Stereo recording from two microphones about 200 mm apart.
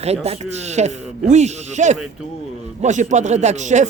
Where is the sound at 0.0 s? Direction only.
30° right (ahead or behind).